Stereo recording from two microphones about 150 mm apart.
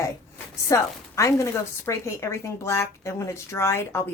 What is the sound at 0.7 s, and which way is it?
Speech, 20° left (ahead or behind).